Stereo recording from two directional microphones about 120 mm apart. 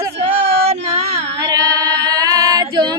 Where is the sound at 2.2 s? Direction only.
30° right (ahead or behind).